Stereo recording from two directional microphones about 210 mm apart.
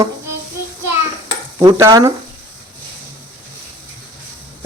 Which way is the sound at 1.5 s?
20° right (ahead or behind).